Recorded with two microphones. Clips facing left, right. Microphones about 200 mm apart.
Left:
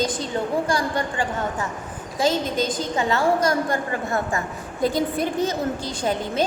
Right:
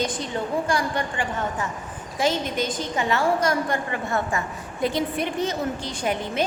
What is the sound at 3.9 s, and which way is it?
A woman's voice, 45° left (ahead or behind).